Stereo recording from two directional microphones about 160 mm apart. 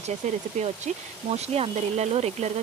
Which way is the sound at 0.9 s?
45° right (ahead or behind).